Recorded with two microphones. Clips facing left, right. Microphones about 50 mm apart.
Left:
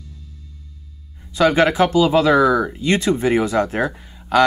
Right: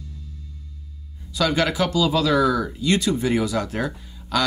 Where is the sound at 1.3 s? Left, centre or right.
Left.